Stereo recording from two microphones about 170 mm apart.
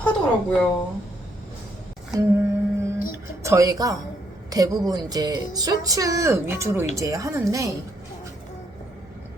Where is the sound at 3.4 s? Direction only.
20° right (ahead or behind).